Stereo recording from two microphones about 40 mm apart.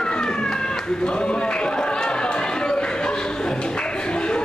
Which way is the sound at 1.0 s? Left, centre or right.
Left.